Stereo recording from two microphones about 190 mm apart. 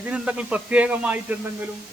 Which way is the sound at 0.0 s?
5° right (ahead or behind).